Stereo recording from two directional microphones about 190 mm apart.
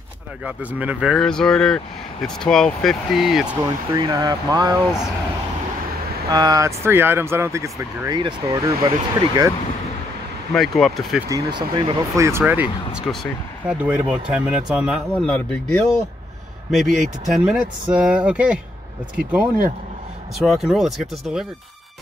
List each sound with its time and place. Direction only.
0.5 s speech: 10° right (ahead or behind)
3.9 s speech: 20° right (ahead or behind)
6.3 s speech: 20° right (ahead or behind)
10.5 s speech: centre (ahead or behind)
11.2 s speech: 20° right (ahead or behind)
12.3 s speech: 10° right (ahead or behind)
12.9 s speech: centre (ahead or behind)
20.3 s speech: centre (ahead or behind)